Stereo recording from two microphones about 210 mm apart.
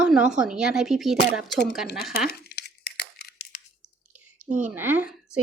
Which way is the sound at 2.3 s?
50° left (ahead or behind).